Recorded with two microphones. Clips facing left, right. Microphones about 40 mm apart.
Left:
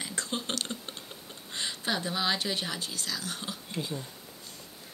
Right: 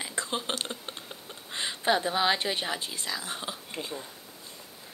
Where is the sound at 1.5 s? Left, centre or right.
Right.